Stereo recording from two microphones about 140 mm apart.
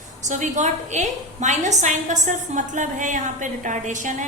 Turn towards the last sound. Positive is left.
turn(degrees=-65)  # may be behind; listen again after turning